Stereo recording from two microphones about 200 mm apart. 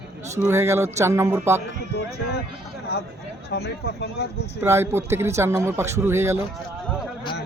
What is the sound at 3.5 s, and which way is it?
Speech, 55° left (ahead or behind).